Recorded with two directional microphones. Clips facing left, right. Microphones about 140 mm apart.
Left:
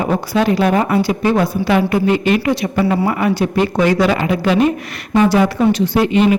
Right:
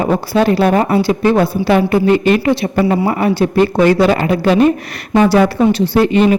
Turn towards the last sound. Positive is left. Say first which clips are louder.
# right 2 dB
turn(degrees=-40)  # may be behind; listen again after turning